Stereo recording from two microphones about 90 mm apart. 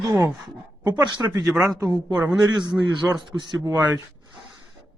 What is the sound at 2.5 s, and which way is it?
A man's voice, 55° right (ahead or behind).